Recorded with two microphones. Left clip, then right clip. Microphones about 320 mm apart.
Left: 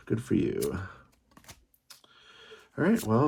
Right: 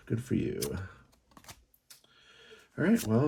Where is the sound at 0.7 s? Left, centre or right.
Centre.